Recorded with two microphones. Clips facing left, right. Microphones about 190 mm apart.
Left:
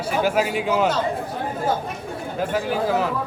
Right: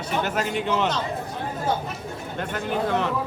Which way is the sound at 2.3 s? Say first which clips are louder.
Left 4 dB; 5° left (ahead or behind).